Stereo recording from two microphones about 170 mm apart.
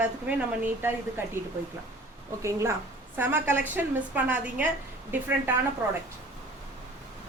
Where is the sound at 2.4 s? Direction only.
15° right (ahead or behind).